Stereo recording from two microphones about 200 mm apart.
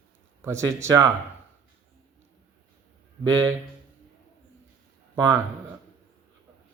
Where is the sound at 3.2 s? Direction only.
15° right (ahead or behind).